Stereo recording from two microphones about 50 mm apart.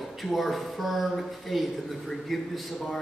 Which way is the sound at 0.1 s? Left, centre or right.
Centre.